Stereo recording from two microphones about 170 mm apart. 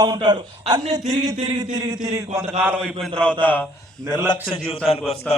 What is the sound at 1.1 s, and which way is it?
A man's voice, 20° right (ahead or behind).